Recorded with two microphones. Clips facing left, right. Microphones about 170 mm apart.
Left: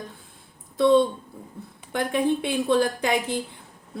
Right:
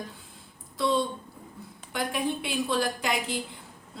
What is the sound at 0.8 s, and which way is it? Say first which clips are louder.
A man's voice: left 8 dB; 55° left (ahead or behind).